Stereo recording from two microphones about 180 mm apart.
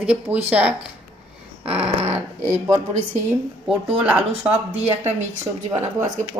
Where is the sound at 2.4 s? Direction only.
40° right (ahead or behind).